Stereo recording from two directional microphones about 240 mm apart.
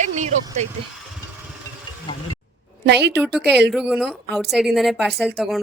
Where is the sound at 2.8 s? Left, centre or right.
Right.